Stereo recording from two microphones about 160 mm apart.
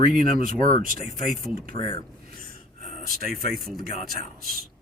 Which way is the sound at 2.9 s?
65° right (ahead or behind).